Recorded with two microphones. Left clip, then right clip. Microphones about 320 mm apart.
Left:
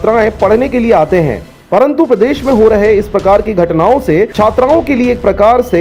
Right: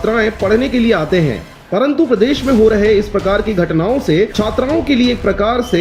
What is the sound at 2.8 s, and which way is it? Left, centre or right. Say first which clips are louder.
Speech: left 3 dB; centre.